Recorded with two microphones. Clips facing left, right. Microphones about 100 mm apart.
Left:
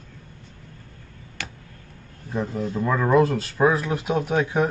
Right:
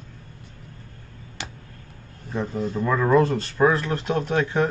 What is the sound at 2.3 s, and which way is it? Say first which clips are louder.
Speech: even; centre (ahead or behind).